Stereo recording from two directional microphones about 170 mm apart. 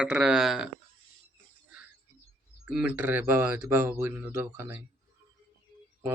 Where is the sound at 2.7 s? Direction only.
10° right (ahead or behind).